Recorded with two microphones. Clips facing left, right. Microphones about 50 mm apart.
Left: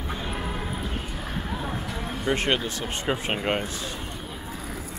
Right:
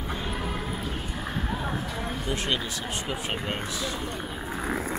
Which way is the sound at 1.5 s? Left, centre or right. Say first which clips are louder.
Even; centre.